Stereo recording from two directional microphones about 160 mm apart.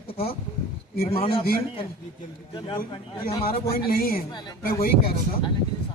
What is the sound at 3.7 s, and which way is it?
Speech, 70° left (ahead or behind).